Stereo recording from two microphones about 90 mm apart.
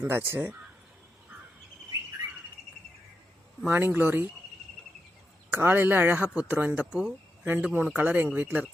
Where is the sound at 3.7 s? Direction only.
25° right (ahead or behind).